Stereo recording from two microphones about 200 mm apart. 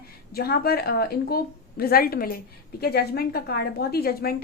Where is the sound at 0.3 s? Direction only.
50° left (ahead or behind).